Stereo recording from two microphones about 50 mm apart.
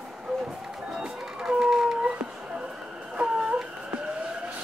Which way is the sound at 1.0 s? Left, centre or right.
Centre.